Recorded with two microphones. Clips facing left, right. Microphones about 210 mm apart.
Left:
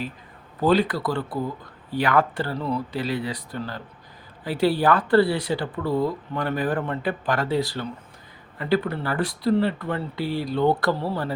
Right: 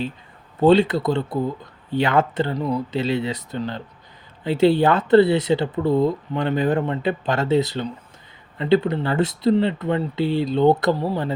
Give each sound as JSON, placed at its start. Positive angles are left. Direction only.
{"t": 0.6, "sound": "speech", "side_deg": -25}